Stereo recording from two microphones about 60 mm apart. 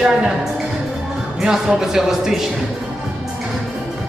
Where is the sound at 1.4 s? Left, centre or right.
Centre.